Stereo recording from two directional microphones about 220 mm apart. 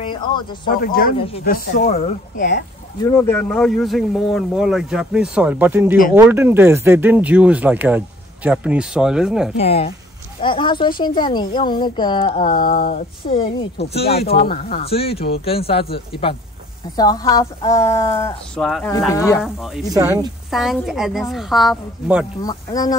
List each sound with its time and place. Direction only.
0.1 s speech: 20° left (ahead or behind)
0.7 s speech: 40° left (ahead or behind)
3.0 s speech: 10° left (ahead or behind)
9.6 s a woman's voice: 25° left (ahead or behind)
12.4 s speech: 35° left (ahead or behind)
13.2 s a woman's voice: 25° left (ahead or behind)
13.7 s speech: 50° left (ahead or behind)
14.8 s a woman's voice: 25° left (ahead or behind)
18.6 s speech: centre (ahead or behind)
18.9 s a woman's voice: 10° left (ahead or behind)
19.4 s speech: centre (ahead or behind)
19.9 s speech: 15° right (ahead or behind)
20.5 s speech: centre (ahead or behind)
22.4 s a woman's voice: 15° left (ahead or behind)